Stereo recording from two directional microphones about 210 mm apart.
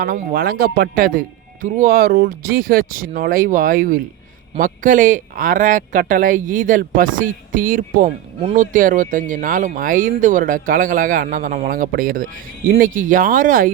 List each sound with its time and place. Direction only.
0.0 s speech: 45° right (ahead or behind)